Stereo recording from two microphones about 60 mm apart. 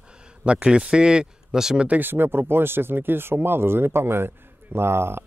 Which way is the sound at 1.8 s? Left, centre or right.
Right.